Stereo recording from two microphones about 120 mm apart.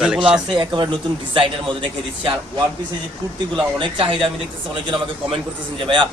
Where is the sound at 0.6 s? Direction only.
40° right (ahead or behind).